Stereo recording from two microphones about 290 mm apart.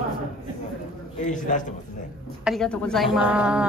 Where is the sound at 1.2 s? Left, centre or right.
Left.